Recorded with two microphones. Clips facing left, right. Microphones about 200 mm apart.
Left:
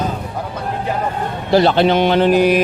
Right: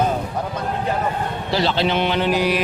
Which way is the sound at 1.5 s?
55° left (ahead or behind).